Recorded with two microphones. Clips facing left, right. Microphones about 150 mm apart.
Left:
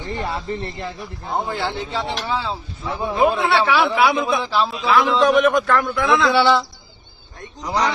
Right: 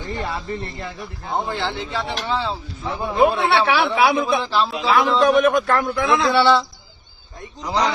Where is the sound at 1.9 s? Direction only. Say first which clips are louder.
Left 1 dB; 15° left (ahead or behind).